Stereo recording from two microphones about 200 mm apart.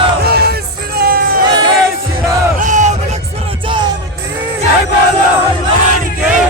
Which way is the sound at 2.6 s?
40° right (ahead or behind).